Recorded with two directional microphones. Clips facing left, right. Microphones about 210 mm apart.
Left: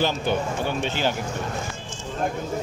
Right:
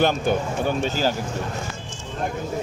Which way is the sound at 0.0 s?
50° right (ahead or behind).